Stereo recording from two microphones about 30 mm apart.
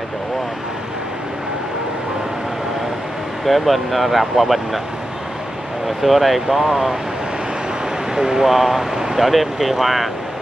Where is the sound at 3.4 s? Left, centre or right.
Centre.